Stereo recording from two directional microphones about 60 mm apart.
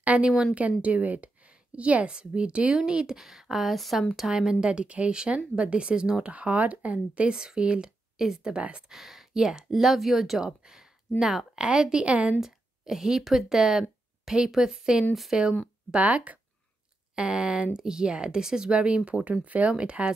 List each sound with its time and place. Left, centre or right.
0.0 s speech: right
8.9 s speech: centre; by 12.4 s right
12.4 s speech: centre
16.0 s speech: right
17.1 s speech: centre